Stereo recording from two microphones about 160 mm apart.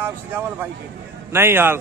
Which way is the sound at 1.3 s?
15° right (ahead or behind).